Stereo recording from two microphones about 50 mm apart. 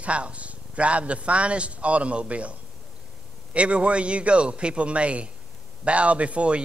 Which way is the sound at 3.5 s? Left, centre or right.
Right.